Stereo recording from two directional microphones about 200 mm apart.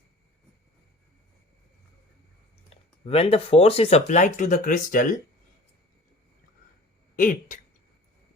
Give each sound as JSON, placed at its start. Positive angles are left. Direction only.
{"t": 2.7, "sound": "a sound", "side_deg": 30}
{"t": 3.1, "sound": "speech", "side_deg": 30}
{"t": 7.2, "sound": "speech", "side_deg": 40}